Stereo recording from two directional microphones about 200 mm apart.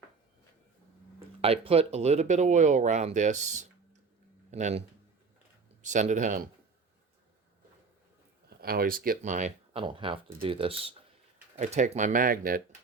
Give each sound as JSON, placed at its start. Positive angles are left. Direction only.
{"t": 1.4, "sound": "speech", "side_deg": -30}
{"t": 5.8, "sound": "speech", "side_deg": -40}
{"t": 8.4, "sound": "speech", "side_deg": -50}
{"t": 9.7, "sound": "speech", "side_deg": -25}